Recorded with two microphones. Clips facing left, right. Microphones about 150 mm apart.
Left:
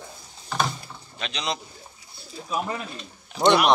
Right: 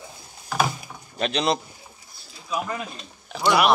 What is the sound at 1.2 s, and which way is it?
Speech, 55° right (ahead or behind).